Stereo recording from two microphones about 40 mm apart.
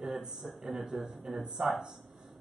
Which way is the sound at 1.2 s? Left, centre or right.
Centre.